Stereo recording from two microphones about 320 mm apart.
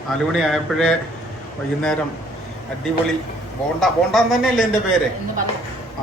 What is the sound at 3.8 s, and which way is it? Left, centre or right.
Speech, centre.